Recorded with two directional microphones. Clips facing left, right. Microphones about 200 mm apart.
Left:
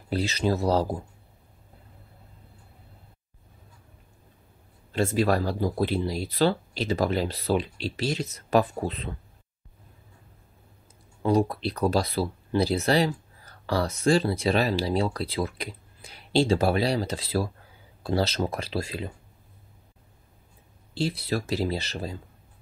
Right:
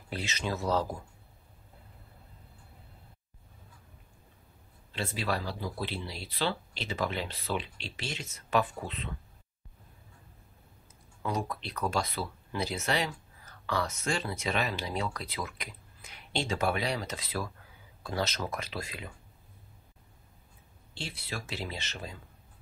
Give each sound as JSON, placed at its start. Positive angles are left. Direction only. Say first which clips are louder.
{"t": 0.1, "sound": "speech", "louder": "left 9 dB", "side_deg": 35}
{"t": 4.9, "sound": "speech", "louder": "left 10 dB", "side_deg": 45}
{"t": 11.2, "sound": "speech", "louder": "left 11 dB", "side_deg": 35}
{"t": 20.9, "sound": "speech", "louder": "left 13 dB", "side_deg": 35}